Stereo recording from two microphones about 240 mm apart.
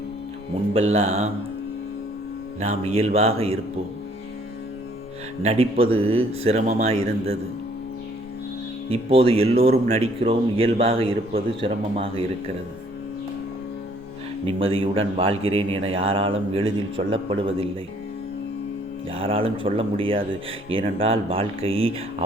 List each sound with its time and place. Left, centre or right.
0.7 s speech: right
2.6 s speech: right
5.4 s speech: right
8.9 s speech: right
14.4 s speech: right
19.1 s speech: right